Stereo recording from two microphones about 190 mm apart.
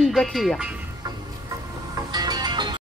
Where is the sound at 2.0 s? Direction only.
20° right (ahead or behind).